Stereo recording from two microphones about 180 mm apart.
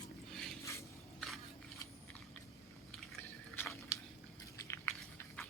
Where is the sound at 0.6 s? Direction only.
15° left (ahead or behind).